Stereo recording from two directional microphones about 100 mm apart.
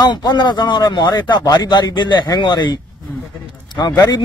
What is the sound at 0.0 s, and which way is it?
A man's voice, 45° left (ahead or behind).